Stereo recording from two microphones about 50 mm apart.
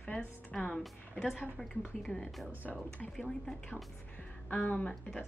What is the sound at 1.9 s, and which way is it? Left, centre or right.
Speech, centre.